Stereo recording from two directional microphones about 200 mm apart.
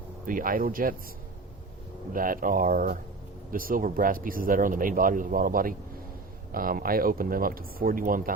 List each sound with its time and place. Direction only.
0.3 s speech: 45° right (ahead or behind)
2.1 s speech: 45° right (ahead or behind)